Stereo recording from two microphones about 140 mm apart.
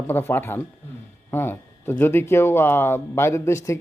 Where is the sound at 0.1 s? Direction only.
15° left (ahead or behind).